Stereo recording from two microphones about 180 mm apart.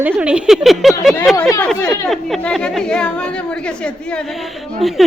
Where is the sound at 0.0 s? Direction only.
10° right (ahead or behind).